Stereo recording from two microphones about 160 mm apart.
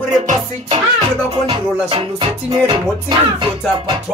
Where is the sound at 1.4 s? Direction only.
35° right (ahead or behind).